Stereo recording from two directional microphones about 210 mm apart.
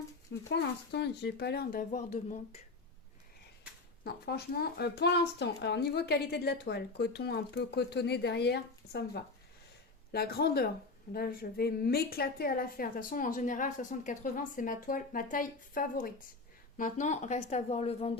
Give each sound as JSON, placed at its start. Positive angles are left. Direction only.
{"t": 0.5, "sound": "speech", "side_deg": 50}
{"t": 4.0, "sound": "a woman's voice", "side_deg": 50}